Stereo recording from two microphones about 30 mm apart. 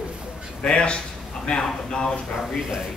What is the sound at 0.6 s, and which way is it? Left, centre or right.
Speech, left.